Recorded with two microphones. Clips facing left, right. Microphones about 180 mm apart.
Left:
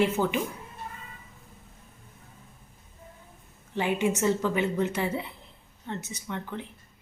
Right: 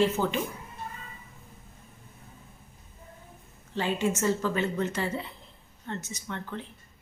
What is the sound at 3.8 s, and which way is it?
A woman's voice, 15° left (ahead or behind).